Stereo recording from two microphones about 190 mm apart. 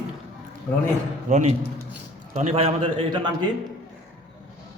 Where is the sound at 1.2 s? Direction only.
40° right (ahead or behind).